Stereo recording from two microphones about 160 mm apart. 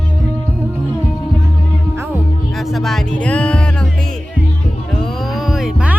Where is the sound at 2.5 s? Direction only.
Centre (ahead or behind).